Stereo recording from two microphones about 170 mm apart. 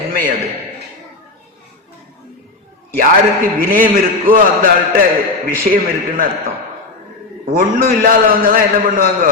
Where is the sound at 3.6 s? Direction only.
55° right (ahead or behind).